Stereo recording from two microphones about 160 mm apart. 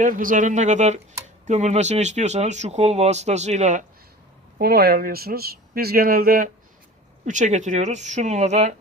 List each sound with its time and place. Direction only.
0.0 s speech: 55° right (ahead or behind)
4.5 s speech: 80° right; by 6.5 s 65° right (ahead or behind)
7.3 s speech: 50° right (ahead or behind)